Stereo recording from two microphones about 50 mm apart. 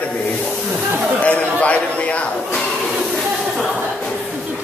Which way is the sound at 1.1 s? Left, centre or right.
Left.